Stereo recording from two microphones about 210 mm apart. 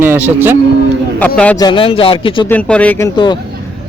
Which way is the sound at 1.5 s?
20° left (ahead or behind).